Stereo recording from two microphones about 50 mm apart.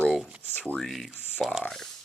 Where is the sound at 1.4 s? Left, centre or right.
Centre.